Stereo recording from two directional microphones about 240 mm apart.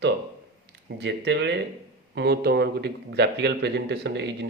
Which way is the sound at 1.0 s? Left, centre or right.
Right.